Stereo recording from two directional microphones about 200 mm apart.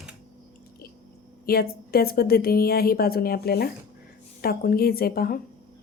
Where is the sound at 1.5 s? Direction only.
50° left (ahead or behind).